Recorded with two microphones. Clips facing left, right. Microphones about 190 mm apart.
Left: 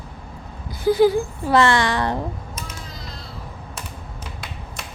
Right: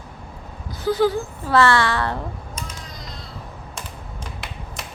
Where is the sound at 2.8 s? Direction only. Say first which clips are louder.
Even; centre (ahead or behind).